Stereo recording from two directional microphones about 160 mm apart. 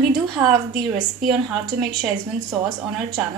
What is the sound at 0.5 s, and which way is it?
Speech, 60° right (ahead or behind).